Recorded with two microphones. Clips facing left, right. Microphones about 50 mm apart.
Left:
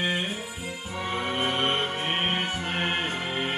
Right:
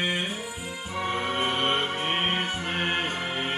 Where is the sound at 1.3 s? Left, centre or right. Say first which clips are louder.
Left 1 dB; centre.